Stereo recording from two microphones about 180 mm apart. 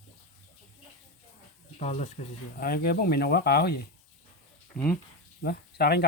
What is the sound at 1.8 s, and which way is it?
Speech, 40° left (ahead or behind).